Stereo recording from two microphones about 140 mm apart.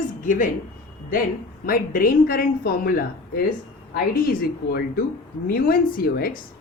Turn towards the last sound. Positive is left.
turn(degrees=90)